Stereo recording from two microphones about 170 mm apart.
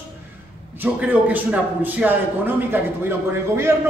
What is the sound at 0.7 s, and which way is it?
A man's voice, 10° right (ahead or behind).